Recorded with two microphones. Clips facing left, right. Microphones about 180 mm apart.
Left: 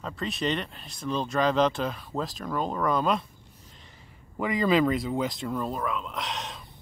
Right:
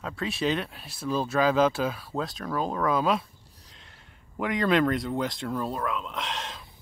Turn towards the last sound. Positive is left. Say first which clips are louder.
# even
turn(degrees=0)  # may be behind; listen again after turning